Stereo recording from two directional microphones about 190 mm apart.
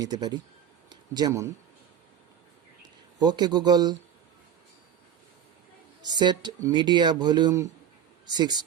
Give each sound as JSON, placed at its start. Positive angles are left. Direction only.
{"t": 0.0, "sound": "speech", "side_deg": -20}
{"t": 3.2, "sound": "speech", "side_deg": -20}
{"t": 6.0, "sound": "speech", "side_deg": -20}